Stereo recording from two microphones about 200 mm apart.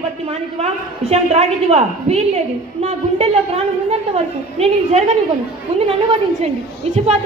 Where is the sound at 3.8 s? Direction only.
30° right (ahead or behind).